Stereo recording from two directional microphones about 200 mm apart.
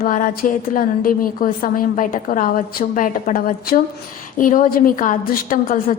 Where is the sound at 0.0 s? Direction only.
40° left (ahead or behind).